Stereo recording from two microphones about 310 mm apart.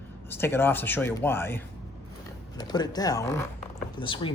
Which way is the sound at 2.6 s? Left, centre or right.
Centre.